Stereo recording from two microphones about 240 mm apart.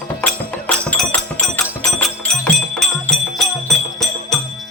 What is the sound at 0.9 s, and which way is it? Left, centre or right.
Music, centre.